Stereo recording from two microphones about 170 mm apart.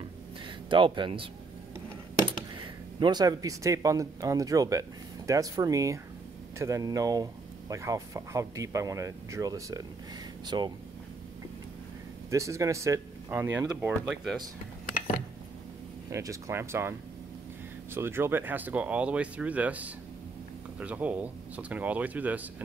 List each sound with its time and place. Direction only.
0.7 s speech: 30° right (ahead or behind)
12.3 s speech: 15° right (ahead or behind)
15.0 s a sound: 55° left (ahead or behind)
16.1 s speech: 15° right (ahead or behind)
17.9 s speech: 15° right (ahead or behind)